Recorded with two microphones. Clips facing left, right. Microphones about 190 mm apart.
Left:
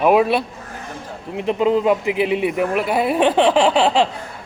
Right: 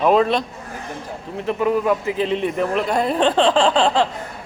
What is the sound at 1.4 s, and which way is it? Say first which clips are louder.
A man's voice: left 2 dB; 20° left (ahead or behind).